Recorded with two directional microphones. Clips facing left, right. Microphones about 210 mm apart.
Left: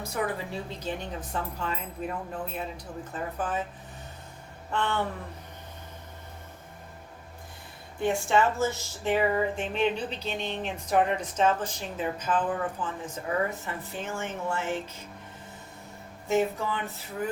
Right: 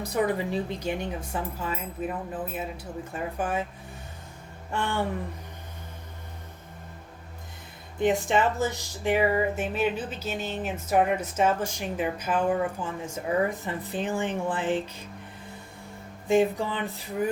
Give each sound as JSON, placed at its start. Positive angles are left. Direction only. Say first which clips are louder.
{"t": 0.1, "sound": "speech", "louder": "right 6 dB", "side_deg": -15}
{"t": 4.7, "sound": "speech", "louder": "even", "side_deg": -10}
{"t": 8.0, "sound": "speech", "louder": "right 1 dB", "side_deg": -20}
{"t": 16.2, "sound": "speech", "louder": "right 4 dB", "side_deg": -15}